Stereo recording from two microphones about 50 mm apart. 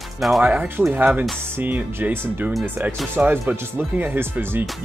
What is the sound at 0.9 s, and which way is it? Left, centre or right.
Speech, right.